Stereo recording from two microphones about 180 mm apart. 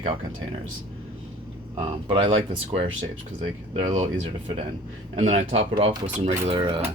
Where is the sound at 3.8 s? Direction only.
35° right (ahead or behind).